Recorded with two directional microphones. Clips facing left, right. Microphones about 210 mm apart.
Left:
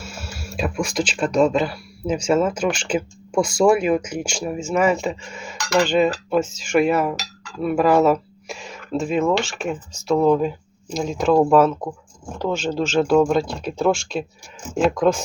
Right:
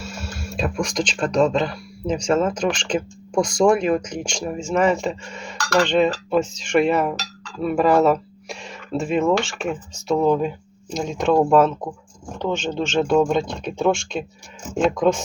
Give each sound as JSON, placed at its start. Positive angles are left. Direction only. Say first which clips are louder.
{"t": 0.0, "sound": "speech", "louder": "right 2 dB", "side_deg": 0}
{"t": 5.5, "sound": "dishes", "louder": "even", "side_deg": 20}
{"t": 5.8, "sound": "speech", "louder": "even", "side_deg": 5}